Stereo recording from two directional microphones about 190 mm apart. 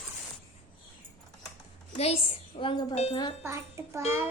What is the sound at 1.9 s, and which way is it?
Speech, 30° left (ahead or behind).